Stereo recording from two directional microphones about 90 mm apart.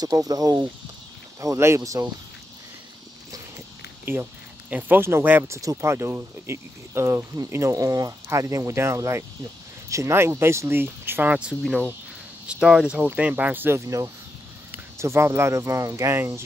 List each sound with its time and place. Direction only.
0.0 s speech: 40° right (ahead or behind)
4.0 s speech: 25° right (ahead or behind)
5.6 s speech: 35° right (ahead or behind)
12.4 s speech: 5° right (ahead or behind)
13.7 s speech: 35° right (ahead or behind)